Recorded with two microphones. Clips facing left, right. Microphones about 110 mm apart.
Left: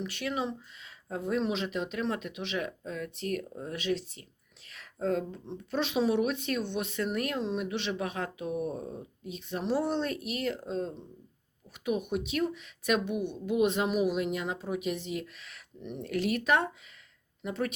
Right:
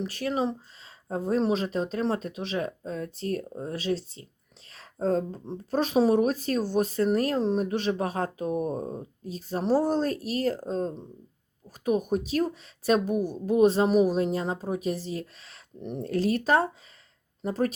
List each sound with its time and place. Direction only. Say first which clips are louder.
0.0 s speech: right 5 dB; 35° right (ahead or behind)